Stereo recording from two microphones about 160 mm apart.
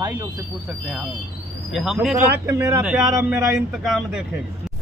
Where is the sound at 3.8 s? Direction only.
Centre (ahead or behind).